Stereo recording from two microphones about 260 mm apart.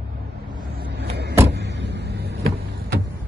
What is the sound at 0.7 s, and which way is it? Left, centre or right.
Vehicle, right.